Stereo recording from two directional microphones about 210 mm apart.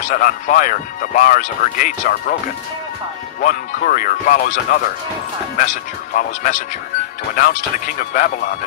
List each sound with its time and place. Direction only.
0.1 s speech: 40° left (ahead or behind)
3.4 s speech: 40° left (ahead or behind)
6.1 s speech: 40° left (ahead or behind)